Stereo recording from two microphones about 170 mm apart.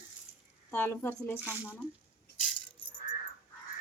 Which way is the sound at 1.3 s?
10° right (ahead or behind).